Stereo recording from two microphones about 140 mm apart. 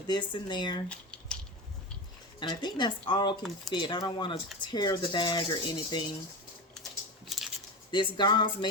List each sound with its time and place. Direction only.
0.1 s speech: 30° left (ahead or behind)
0.9 s typing: 5° left (ahead or behind)
2.4 s speech: 30° left (ahead or behind)
7.3 s biting: centre (ahead or behind)
7.9 s speech: 35° left (ahead or behind)